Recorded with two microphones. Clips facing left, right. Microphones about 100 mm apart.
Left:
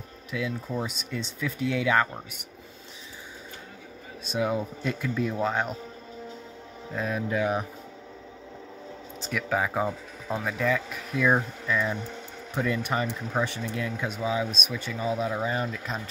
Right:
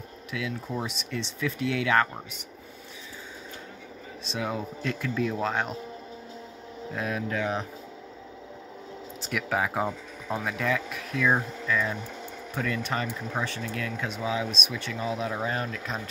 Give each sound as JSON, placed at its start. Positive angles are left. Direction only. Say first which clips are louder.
{"t": 0.3, "sound": "speech", "louder": "left 2 dB", "side_deg": 0}
{"t": 4.3, "sound": "speech", "louder": "left 4 dB", "side_deg": 5}
{"t": 7.0, "sound": "speech", "louder": "left 1 dB", "side_deg": 0}
{"t": 7.2, "sound": "speech", "louder": "left 5 dB", "side_deg": 10}
{"t": 9.2, "sound": "speech", "louder": "left 1 dB", "side_deg": -5}